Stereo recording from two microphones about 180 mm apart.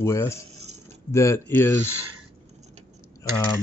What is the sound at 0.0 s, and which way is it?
Speech, 15° left (ahead or behind).